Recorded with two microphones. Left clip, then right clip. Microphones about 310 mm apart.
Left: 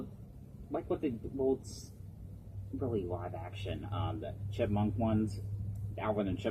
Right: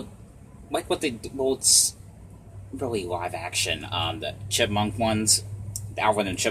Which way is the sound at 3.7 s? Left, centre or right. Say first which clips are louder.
Right 13 dB; right.